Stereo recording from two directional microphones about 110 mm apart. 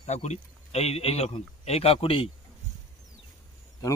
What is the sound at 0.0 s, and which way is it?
Speech, 90° left.